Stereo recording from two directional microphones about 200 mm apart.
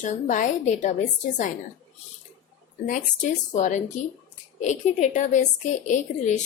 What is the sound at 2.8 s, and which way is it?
A woman's voice, 40° left (ahead or behind).